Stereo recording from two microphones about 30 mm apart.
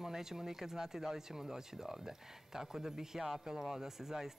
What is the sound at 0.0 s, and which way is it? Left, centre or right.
Speech, centre.